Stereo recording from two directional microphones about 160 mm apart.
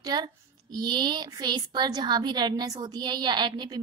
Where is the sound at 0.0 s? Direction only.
25° right (ahead or behind).